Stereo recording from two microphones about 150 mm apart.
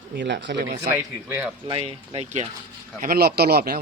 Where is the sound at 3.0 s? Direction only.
80° right.